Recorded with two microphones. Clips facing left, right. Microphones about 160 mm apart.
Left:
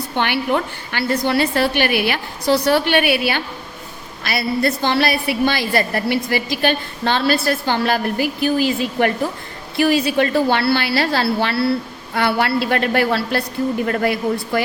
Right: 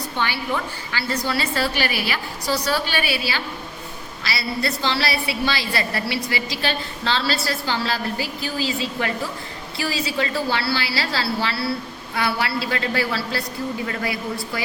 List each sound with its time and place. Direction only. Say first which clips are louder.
0.2 s a woman's voice: left 6 dB; 60° left (ahead or behind)